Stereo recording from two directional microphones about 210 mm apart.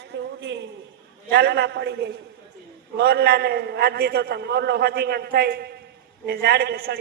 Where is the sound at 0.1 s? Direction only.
55° right (ahead or behind).